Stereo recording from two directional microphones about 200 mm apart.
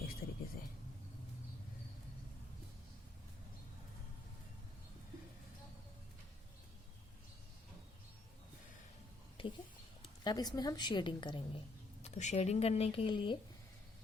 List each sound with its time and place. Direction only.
0.2 s a sound: 50° left (ahead or behind)
9.4 s a woman's voice: 25° left (ahead or behind)
12.0 s speech: 35° left (ahead or behind)